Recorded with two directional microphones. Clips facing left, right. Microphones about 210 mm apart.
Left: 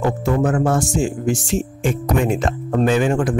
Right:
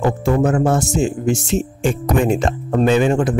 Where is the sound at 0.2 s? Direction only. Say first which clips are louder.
Right 2 dB; 25° right (ahead or behind).